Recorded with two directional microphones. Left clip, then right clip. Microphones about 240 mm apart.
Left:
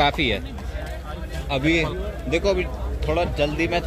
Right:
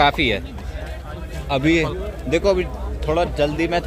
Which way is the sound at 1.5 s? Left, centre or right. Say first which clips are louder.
Right 3 dB; right.